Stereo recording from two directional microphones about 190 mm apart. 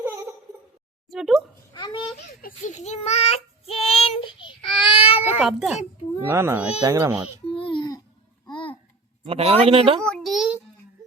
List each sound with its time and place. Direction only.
1.1 s a sound: centre (ahead or behind)
1.7 s a child's voice: 20° left (ahead or behind)
2.4 s child singing: 40° left (ahead or behind)
5.2 s a child's voice: 5° right (ahead or behind)
7.4 s babbling: 30° left (ahead or behind)
9.2 s speech: 30° right (ahead or behind)
10.0 s a child's voice: 5° left (ahead or behind)